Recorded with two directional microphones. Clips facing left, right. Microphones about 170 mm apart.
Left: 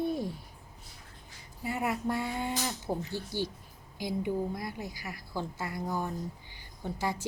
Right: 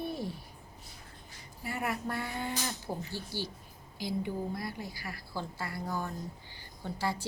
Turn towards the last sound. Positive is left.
turn(degrees=15)  # may be behind; listen again after turning